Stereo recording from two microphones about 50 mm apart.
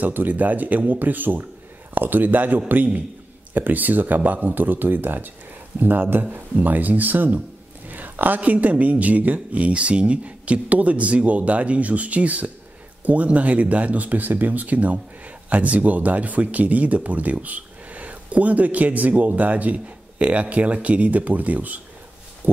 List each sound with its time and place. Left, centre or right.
0.0 s speech: right
7.9 s a sound: right
8.4 s speech: right